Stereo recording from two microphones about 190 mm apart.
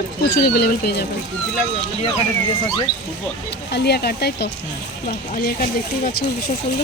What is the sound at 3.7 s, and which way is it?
Speech, 60° left (ahead or behind).